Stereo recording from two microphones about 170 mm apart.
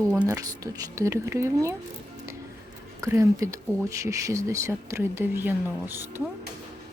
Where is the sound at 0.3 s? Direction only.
20° right (ahead or behind).